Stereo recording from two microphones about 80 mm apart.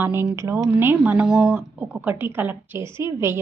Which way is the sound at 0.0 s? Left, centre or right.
Right.